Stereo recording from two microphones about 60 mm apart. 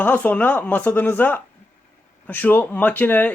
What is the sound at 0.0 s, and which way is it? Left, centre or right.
A man's voice, left.